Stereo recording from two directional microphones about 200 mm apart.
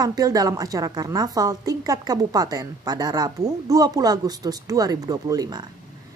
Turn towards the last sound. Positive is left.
turn(degrees=-20)  # may be behind; listen again after turning